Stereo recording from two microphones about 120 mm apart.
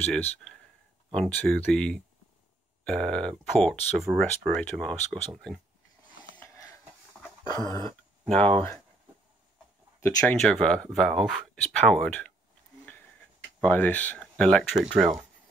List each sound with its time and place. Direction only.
0.0 s speech: 5° left (ahead or behind)
6.3 s a sound: 20° left (ahead or behind)
7.5 s dog: 35° left (ahead or behind)
8.3 s speech: 10° left (ahead or behind)
9.9 s speech: 20° left (ahead or behind)
10.4 s speech: 5° left (ahead or behind)
13.6 s speech: 15° left (ahead or behind); by 15.1 s centre (ahead or behind)